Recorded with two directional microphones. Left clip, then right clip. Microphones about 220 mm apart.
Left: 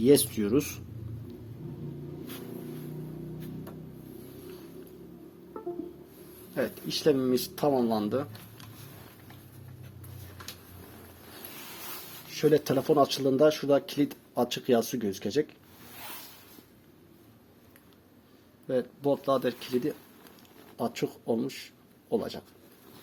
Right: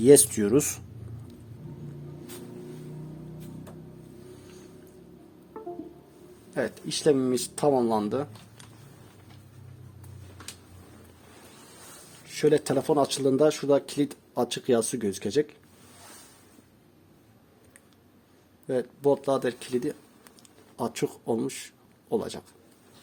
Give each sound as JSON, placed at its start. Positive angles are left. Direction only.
{"t": 0.0, "sound": "speech", "side_deg": -35}
{"t": 6.5, "sound": "speech", "side_deg": -30}
{"t": 12.3, "sound": "speech", "side_deg": -35}
{"t": 18.7, "sound": "speech", "side_deg": -30}